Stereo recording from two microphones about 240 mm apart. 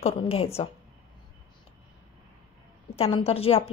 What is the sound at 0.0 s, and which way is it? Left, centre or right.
Speech, left.